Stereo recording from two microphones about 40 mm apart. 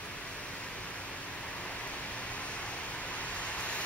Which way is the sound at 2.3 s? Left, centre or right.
Left.